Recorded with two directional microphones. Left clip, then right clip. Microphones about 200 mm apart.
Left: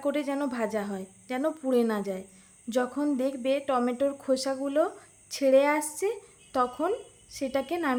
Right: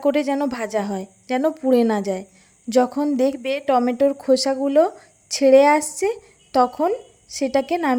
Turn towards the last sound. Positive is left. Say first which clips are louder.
# right 9 dB
turn(degrees=-30)  # may be behind; listen again after turning